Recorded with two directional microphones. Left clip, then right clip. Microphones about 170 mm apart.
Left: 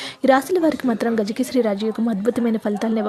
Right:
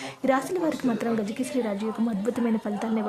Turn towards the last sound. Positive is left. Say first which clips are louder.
# left 7 dB
turn(degrees=30)  # may be behind; listen again after turning